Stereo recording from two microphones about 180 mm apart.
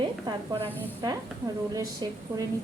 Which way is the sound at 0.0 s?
25° right (ahead or behind).